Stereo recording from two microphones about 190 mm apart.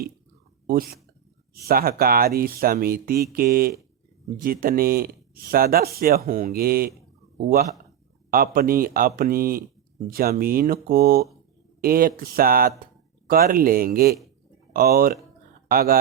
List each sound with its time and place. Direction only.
0.7 s speech: 50° right (ahead or behind)
8.3 s speech: 50° right (ahead or behind)